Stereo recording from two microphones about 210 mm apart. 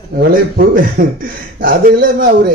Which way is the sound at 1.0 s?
40° right (ahead or behind).